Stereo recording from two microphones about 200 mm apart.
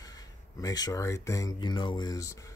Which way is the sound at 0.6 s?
20° left (ahead or behind).